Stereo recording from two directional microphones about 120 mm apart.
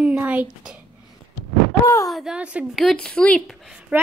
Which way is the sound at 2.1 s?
5° right (ahead or behind).